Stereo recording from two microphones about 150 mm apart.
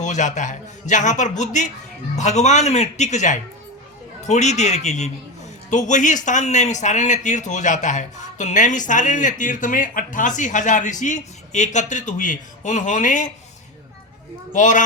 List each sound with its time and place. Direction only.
0.0 s a man's voice: 55° left (ahead or behind)
14.5 s a man's voice: 60° left (ahead or behind)